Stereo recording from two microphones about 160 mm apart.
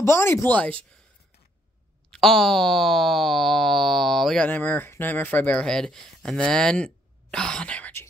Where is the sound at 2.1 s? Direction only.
Centre (ahead or behind).